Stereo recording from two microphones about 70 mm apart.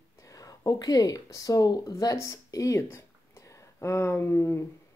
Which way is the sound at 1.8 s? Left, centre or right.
Left.